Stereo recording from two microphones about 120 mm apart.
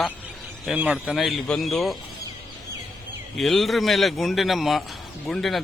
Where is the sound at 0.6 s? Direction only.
10° right (ahead or behind).